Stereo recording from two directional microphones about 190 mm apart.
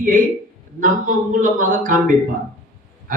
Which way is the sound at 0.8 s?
45° right (ahead or behind).